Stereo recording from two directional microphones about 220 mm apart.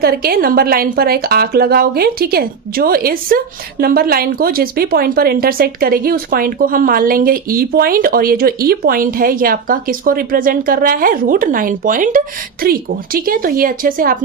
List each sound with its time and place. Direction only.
0.0 s speech: 45° right (ahead or behind)